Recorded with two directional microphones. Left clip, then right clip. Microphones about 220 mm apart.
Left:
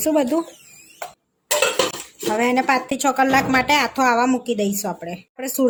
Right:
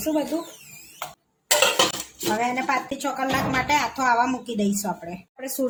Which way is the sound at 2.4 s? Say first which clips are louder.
Left 7 dB; 45° left (ahead or behind).